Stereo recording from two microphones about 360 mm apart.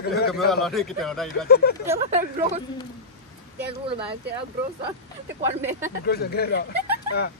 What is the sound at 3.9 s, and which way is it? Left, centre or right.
Speech, centre.